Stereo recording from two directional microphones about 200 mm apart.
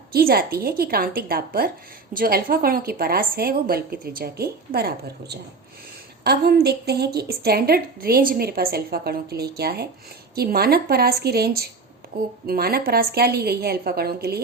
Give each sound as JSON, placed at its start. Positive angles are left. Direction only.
{"t": 0.1, "sound": "a woman's voice", "side_deg": -50}